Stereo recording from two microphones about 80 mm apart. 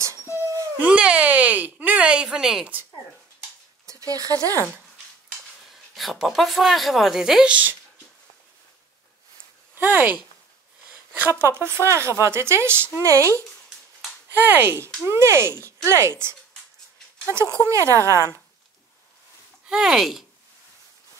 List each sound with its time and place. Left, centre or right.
0.3 s wail: right
0.7 s speech: centre
3.8 s speech: right
5.7 s speech: centre
9.8 s speech: right
11.1 s speech: right
14.3 s speech: right
19.7 s speech: centre